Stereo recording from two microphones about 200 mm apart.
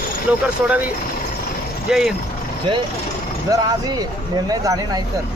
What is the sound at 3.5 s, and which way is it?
Speech, 20° right (ahead or behind).